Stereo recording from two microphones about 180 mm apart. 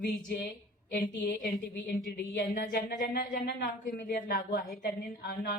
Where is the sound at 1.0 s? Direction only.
55° left (ahead or behind).